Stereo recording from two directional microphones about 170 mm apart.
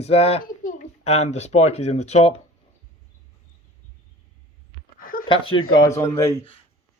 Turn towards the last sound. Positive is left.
turn(degrees=20)  # may be behind; listen again after turning